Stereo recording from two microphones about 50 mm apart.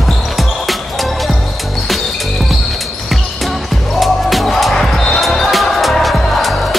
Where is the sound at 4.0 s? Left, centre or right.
Centre.